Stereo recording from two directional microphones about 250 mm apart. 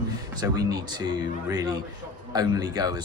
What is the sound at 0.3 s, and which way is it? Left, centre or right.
Speech, centre.